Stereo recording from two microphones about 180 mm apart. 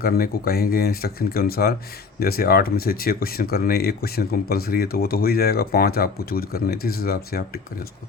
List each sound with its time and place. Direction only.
0.0 s speech: 55° left (ahead or behind)